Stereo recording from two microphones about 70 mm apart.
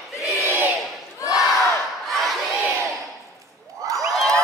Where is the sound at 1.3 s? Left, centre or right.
Centre.